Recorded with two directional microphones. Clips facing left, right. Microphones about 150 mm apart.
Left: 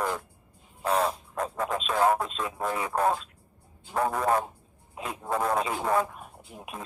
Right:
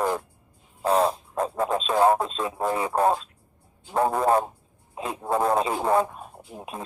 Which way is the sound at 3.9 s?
30° right (ahead or behind).